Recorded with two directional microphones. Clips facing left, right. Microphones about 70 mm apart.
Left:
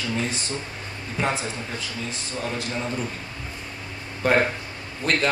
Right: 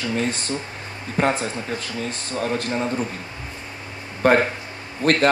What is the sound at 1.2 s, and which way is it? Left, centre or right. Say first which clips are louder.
Speech: right 5 dB; right.